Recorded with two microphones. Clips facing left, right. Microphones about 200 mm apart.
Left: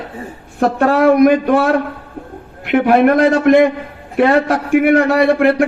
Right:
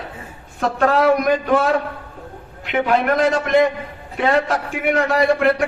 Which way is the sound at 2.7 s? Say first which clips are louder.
Left 7 dB; 55° left (ahead or behind).